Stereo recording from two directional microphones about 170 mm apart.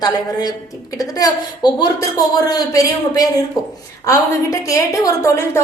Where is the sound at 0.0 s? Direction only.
25° left (ahead or behind).